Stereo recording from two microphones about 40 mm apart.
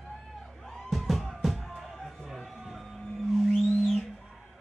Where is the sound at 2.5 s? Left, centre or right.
Centre.